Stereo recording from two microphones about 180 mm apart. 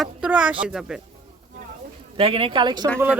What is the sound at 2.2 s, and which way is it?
Speech, 30° right (ahead or behind).